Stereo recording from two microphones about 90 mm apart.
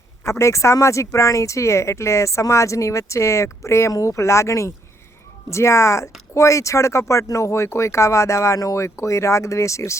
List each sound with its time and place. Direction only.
0.3 s speech: 35° left (ahead or behind)